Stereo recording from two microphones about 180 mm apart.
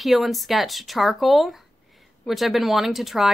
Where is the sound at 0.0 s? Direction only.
Centre (ahead or behind).